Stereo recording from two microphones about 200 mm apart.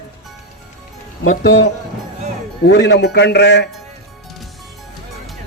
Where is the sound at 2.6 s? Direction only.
60° left (ahead or behind).